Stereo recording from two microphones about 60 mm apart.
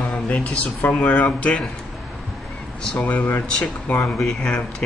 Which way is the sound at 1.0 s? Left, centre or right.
Left.